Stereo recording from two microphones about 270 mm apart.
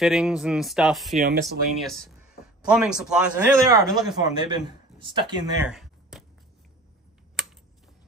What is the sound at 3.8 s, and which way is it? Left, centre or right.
Speech, centre.